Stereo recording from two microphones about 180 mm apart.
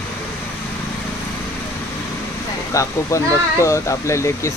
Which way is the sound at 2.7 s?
15° left (ahead or behind).